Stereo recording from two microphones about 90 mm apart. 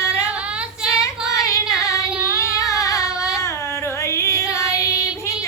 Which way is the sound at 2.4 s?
35° left (ahead or behind).